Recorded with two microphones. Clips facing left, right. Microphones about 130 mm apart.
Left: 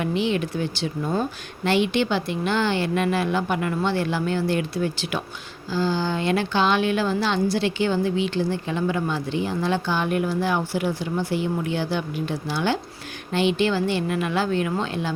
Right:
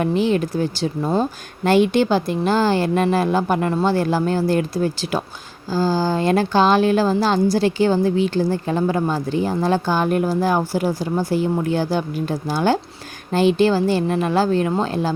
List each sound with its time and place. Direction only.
0.0 s a woman's voice: 40° right (ahead or behind)